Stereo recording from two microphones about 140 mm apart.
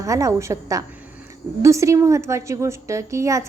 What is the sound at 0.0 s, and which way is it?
A woman's voice, 25° right (ahead or behind).